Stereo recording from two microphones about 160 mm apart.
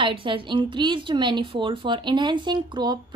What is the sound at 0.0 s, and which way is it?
A woman's voice, 30° right (ahead or behind).